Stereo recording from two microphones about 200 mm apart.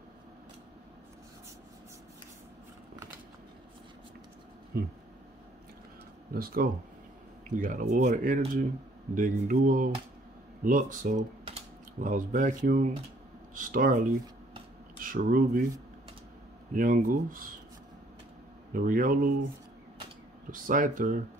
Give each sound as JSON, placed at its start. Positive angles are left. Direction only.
{"t": 4.7, "sound": "speech", "side_deg": -50}
{"t": 6.3, "sound": "speech", "side_deg": -45}
{"t": 16.7, "sound": "speech", "side_deg": -45}
{"t": 18.7, "sound": "speech", "side_deg": -45}
{"t": 20.6, "sound": "speech", "side_deg": -40}